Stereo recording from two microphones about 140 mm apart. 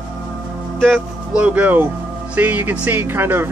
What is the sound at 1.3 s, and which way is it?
Speech, 10° right (ahead or behind).